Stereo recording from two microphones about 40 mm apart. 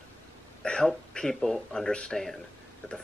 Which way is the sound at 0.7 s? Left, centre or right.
Left.